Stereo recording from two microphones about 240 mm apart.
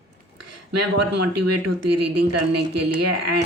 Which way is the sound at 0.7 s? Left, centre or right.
Right.